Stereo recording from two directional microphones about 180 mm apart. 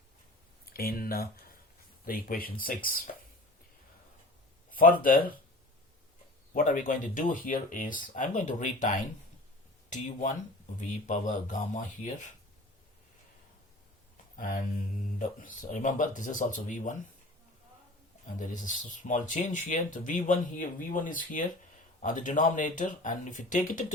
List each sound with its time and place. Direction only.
0.6 s a sound: 55° left (ahead or behind)
2.0 s speech: 50° left (ahead or behind)
6.5 s speech: 45° left (ahead or behind)
14.3 s speech: 50° left (ahead or behind)
18.3 s speech: 45° left (ahead or behind)